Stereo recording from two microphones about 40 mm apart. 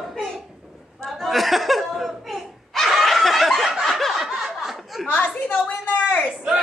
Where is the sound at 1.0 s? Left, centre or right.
Centre.